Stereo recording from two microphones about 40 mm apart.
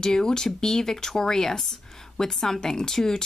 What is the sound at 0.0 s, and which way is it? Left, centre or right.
Speech, centre.